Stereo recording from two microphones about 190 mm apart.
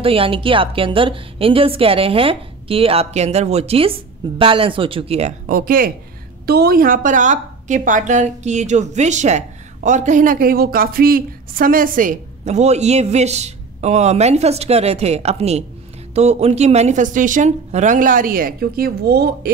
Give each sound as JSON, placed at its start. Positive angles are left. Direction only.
{"t": 0.0, "sound": "a woman's voice", "side_deg": -30}
{"t": 5.5, "sound": "a woman's voice", "side_deg": -50}